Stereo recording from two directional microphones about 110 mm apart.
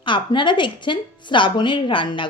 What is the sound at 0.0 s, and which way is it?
A woman's voice, 50° left (ahead or behind).